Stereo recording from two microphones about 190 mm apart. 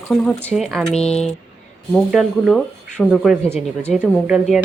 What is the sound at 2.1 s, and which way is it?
Speech, centre (ahead or behind).